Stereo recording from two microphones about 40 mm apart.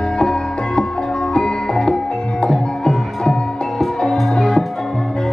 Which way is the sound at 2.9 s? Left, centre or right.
Centre.